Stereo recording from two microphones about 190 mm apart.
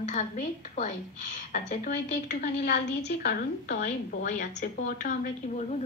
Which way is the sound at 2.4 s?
55° left (ahead or behind).